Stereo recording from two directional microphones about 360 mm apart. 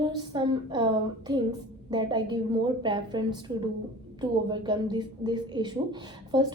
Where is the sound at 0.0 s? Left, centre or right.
Centre.